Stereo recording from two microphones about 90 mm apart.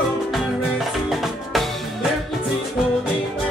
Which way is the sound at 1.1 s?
Centre (ahead or behind).